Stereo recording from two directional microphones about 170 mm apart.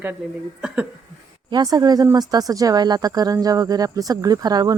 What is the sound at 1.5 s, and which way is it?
Speech, 25° right (ahead or behind).